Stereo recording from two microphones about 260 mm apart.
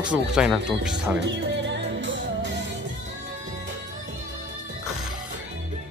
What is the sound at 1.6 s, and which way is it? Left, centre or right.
Music, right.